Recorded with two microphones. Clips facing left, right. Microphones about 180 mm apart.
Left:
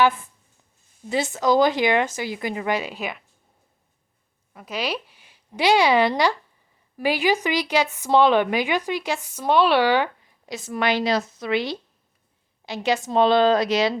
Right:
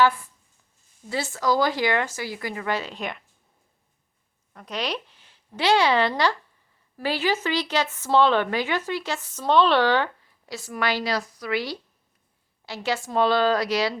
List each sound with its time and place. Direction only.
1.1 s speech: 20° left (ahead or behind)
4.5 s speech: 5° left (ahead or behind); by 13.9 s 20° left (ahead or behind)